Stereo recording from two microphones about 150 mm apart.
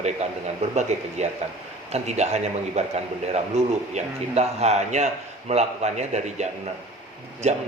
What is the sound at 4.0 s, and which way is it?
Speech, 45° right (ahead or behind).